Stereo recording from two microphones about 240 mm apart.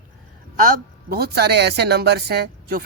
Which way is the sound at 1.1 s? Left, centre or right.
Right.